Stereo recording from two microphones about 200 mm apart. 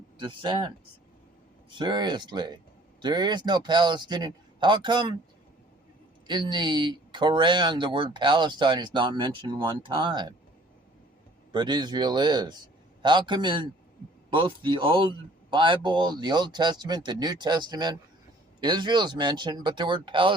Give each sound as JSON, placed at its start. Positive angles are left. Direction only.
{"t": 0.2, "sound": "speech", "side_deg": -25}
{"t": 1.7, "sound": "speech", "side_deg": -25}
{"t": 6.2, "sound": "speech", "side_deg": -20}
{"t": 11.5, "sound": "speech", "side_deg": -20}